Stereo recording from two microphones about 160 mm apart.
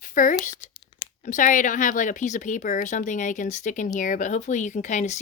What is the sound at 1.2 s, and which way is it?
Speech, 50° left (ahead or behind).